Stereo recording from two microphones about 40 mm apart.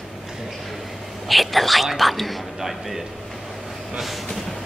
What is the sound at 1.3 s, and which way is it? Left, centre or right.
Speech, centre.